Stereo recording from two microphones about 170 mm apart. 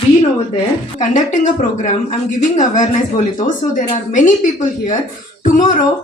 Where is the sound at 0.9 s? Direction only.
50° left (ahead or behind).